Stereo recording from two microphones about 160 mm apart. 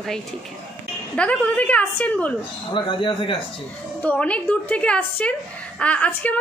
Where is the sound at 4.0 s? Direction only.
10° left (ahead or behind).